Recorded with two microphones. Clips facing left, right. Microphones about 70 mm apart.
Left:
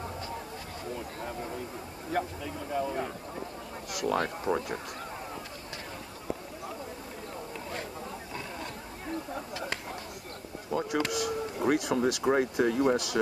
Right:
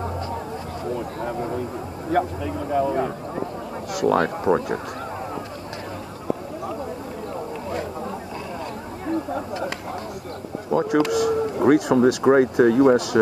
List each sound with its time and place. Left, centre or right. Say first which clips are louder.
1.2 s speech: right 10 dB; right
2.0 s speech: right 10 dB; right
2.9 s speech: right 10 dB; right
10.7 s speech: right 10 dB; right
12.4 s speech: right 10 dB; right